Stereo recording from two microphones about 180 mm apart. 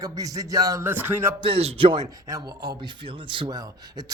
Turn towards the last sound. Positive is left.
turn(degrees=-20)  # may be behind; listen again after turning